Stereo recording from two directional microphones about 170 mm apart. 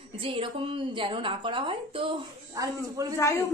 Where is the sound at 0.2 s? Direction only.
30° right (ahead or behind).